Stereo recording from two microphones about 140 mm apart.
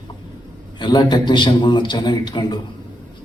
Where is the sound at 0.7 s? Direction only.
35° left (ahead or behind).